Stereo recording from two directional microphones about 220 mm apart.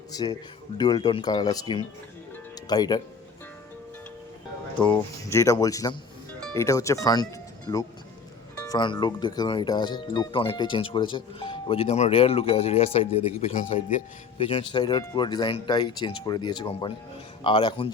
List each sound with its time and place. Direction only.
0.1 s speech: 15° left (ahead or behind)
2.3 s music: 20° left (ahead or behind)
4.9 s speech: 15° left (ahead or behind)